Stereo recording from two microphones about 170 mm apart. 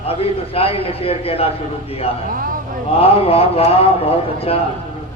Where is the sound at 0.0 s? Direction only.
35° left (ahead or behind).